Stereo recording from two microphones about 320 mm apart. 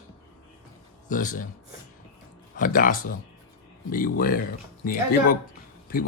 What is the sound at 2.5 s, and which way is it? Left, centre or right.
Speech, left.